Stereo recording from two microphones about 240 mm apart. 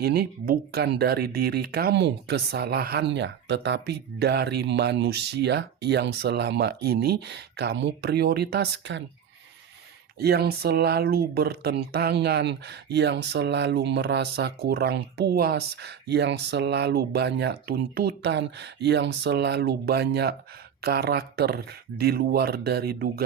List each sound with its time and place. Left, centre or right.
0.0 s speech: right
10.2 s speech: right